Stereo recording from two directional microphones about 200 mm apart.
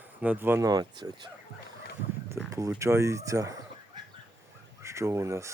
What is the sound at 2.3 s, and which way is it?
Speech, 15° right (ahead or behind).